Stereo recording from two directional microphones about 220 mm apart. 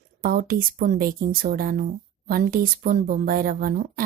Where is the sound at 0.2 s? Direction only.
40° right (ahead or behind).